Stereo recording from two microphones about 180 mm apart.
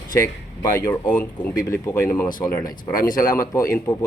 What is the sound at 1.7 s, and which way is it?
Speech, 10° left (ahead or behind).